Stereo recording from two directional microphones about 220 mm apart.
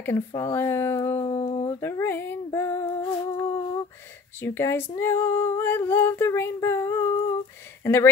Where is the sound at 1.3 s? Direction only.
25° left (ahead or behind).